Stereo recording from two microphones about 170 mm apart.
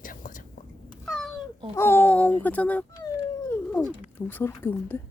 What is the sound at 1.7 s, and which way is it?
A child's voice, 15° left (ahead or behind).